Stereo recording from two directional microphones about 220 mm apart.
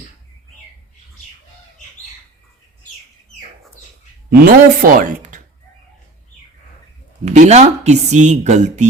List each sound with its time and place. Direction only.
4.4 s speech: 40° right (ahead or behind)
7.3 s speech: 30° right (ahead or behind)